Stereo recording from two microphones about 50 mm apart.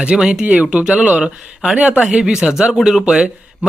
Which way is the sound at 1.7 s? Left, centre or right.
Right.